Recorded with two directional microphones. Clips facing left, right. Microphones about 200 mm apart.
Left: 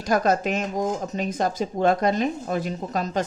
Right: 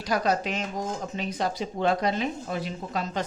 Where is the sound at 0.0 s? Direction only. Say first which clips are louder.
Left 4 dB; 45° left (ahead or behind).